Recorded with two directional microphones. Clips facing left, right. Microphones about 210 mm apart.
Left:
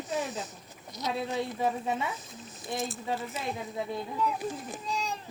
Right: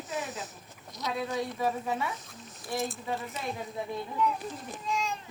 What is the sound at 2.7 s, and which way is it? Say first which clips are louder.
Speech: right 1 dB; centre (ahead or behind).